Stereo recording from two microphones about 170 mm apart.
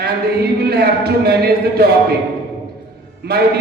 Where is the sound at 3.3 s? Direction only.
65° right (ahead or behind).